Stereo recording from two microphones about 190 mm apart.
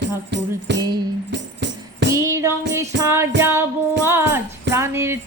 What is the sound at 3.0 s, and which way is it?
Child singing, 15° right (ahead or behind).